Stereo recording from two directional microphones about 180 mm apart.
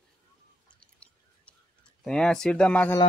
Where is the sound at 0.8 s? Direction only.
5° left (ahead or behind).